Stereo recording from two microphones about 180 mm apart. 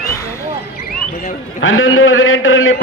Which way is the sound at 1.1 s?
45° left (ahead or behind).